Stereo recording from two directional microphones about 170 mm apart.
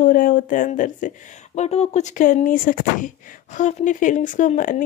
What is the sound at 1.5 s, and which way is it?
Speech, 40° left (ahead or behind).